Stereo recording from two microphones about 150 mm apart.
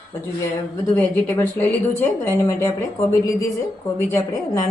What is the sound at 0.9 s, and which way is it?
A woman's voice, 10° left (ahead or behind).